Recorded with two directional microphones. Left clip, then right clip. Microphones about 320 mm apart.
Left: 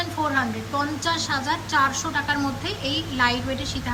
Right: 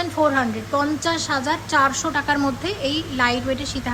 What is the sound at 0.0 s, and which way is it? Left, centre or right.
A woman's voice, centre.